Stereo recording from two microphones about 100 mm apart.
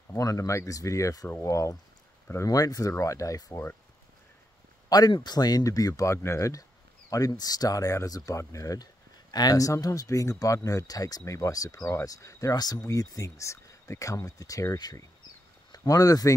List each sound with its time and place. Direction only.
0.1 s speech: 35° left (ahead or behind)
4.8 s speech: 40° left (ahead or behind)